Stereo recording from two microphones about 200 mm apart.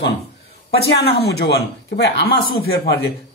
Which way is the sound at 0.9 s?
55° left (ahead or behind).